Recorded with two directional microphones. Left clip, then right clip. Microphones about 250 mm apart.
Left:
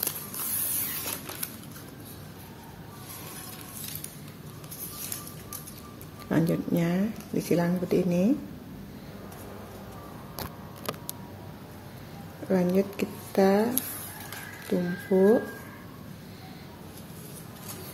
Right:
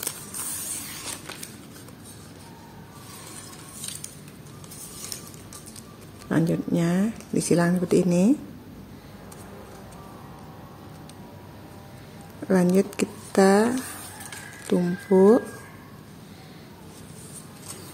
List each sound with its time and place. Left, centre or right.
6.2 s speech: centre
12.4 s a woman's voice: right
14.7 s speech: right